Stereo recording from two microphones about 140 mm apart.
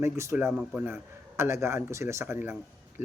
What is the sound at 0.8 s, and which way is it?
Speech, 15° right (ahead or behind).